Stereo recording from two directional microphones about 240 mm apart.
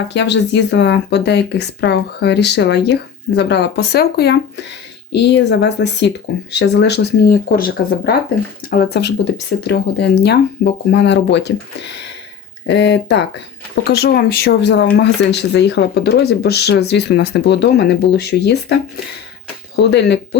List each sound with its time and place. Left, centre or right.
0.1 s speech: left